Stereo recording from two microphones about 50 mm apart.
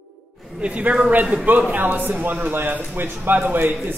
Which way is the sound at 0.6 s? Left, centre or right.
Right.